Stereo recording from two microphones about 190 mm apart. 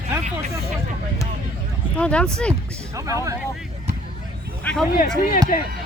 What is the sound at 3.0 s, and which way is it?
Speech, 15° right (ahead or behind).